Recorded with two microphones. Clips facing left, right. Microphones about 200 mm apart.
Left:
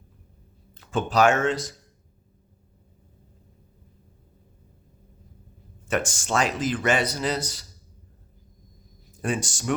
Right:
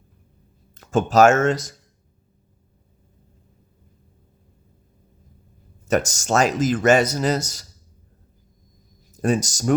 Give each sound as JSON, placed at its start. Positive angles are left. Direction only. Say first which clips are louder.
{"t": 0.7, "sound": "speech", "louder": "right 6 dB", "side_deg": -45}
{"t": 5.9, "sound": "a man's voice", "louder": "right 5 dB", "side_deg": -40}
{"t": 9.1, "sound": "speech", "louder": "right 7 dB", "side_deg": -40}